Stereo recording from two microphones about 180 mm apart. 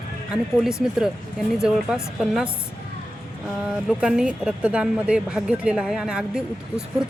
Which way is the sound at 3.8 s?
5° right (ahead or behind).